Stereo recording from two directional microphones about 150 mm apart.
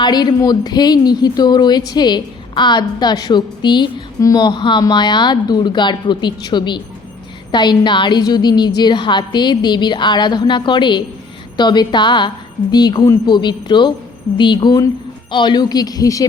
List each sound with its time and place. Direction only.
0.0 s a woman's voice: 30° left (ahead or behind)